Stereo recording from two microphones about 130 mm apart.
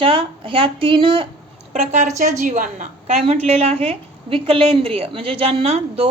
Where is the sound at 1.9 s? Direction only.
65° right (ahead or behind).